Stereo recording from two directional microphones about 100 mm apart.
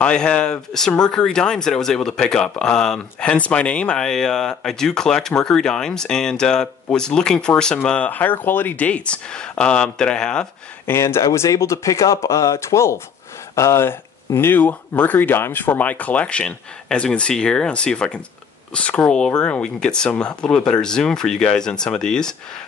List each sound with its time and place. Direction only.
0.0 s speech: 10° left (ahead or behind)
10.9 s speech: 25° left (ahead or behind); by 22.3 s 5° left (ahead or behind)